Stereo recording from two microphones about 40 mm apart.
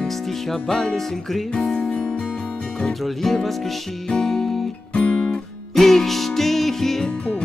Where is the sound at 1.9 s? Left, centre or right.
Left.